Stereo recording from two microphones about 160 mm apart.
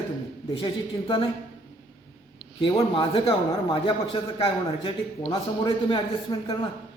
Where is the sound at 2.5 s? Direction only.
35° left (ahead or behind).